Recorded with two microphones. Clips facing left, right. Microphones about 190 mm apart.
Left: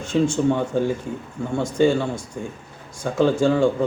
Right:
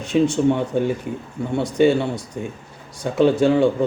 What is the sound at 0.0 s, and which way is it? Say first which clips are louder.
Speech: right 2 dB; 20° right (ahead or behind).